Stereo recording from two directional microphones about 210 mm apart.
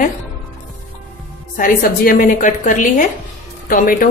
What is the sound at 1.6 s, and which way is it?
Speech, 40° left (ahead or behind).